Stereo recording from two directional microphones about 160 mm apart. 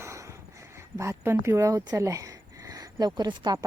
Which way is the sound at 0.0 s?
20° right (ahead or behind).